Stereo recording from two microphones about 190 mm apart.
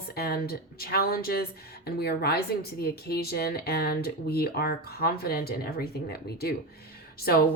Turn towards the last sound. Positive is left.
turn(degrees=55)  # may be behind; listen again after turning